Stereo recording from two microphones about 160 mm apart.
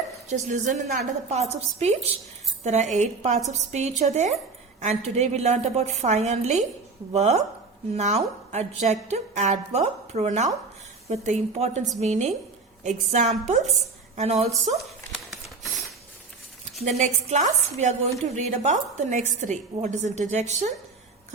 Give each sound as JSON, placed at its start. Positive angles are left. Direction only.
{"t": 0.3, "sound": "a woman's voice", "side_deg": -50}
{"t": 17.0, "sound": "a woman's voice", "side_deg": -50}